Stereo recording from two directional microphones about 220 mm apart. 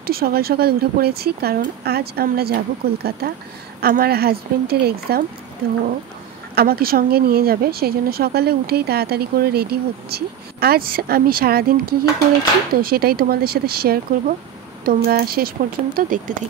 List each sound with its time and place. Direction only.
0.0 s speech: 45° right (ahead or behind)
6.5 s speech: 45° right (ahead or behind)